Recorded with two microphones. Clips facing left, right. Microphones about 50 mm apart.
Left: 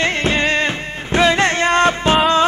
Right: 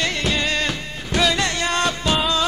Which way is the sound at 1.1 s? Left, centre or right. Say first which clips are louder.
Left 6 dB; left.